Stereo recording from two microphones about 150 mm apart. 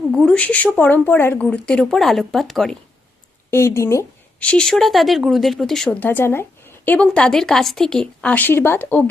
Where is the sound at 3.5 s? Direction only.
15° left (ahead or behind).